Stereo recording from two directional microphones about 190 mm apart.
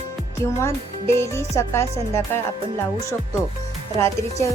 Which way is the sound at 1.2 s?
15° left (ahead or behind).